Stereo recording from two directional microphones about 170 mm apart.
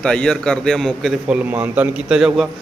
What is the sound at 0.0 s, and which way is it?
A man's voice, 5° left (ahead or behind).